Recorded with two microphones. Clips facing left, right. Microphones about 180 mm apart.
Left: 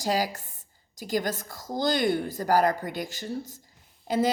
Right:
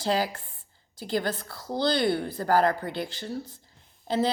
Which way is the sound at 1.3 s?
45° left (ahead or behind).